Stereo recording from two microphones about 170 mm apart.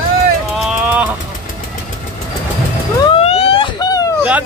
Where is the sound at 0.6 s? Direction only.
5° right (ahead or behind).